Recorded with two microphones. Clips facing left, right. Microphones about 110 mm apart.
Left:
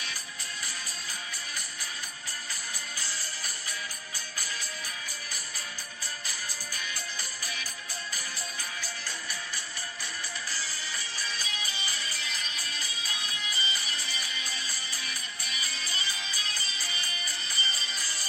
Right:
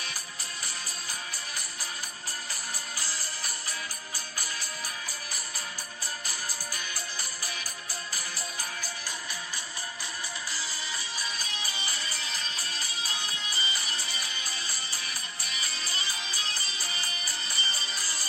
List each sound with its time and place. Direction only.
11.6 s music: 35° right (ahead or behind)
15.5 s music: 35° right (ahead or behind)